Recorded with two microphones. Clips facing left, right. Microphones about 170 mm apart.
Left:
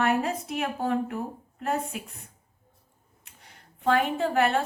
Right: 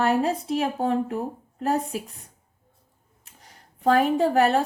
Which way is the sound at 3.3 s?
40° right (ahead or behind).